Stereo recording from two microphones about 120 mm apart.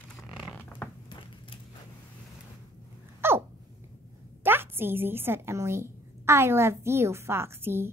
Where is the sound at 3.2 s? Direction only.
20° right (ahead or behind).